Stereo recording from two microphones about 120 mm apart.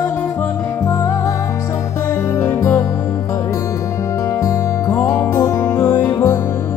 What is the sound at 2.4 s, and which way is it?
Music, 20° left (ahead or behind).